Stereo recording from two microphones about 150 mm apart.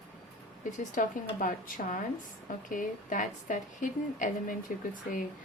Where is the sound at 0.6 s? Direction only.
60° left (ahead or behind).